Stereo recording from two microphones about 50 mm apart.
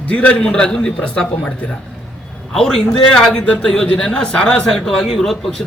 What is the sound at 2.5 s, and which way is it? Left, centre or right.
A man's voice, centre.